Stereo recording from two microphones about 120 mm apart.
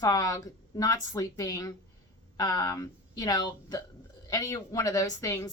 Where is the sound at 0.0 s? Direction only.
30° left (ahead or behind).